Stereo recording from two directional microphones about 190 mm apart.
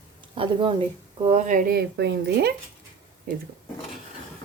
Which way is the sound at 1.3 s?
40° right (ahead or behind).